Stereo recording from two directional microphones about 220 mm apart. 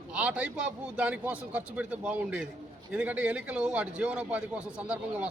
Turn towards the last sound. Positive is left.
turn(degrees=-5)  # may be behind; listen again after turning